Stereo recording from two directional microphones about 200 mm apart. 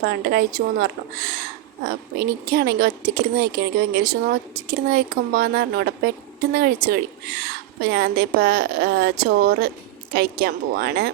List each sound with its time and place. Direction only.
0.0 s a woman's voice: 50° right (ahead or behind)